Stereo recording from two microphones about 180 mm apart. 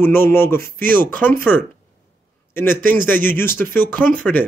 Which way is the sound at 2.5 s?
10° left (ahead or behind).